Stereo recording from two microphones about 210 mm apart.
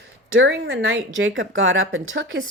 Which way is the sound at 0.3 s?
55° right (ahead or behind).